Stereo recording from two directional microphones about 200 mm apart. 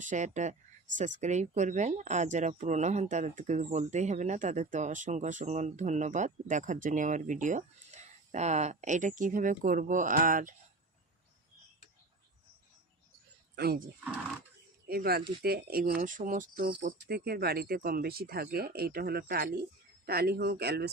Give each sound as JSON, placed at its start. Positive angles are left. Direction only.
{"t": 0.0, "sound": "speech", "side_deg": -40}
{"t": 13.6, "sound": "speech", "side_deg": -50}
{"t": 14.8, "sound": "speech", "side_deg": -50}